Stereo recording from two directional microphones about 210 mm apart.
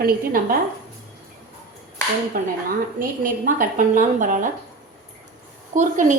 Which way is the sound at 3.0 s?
40° right (ahead or behind).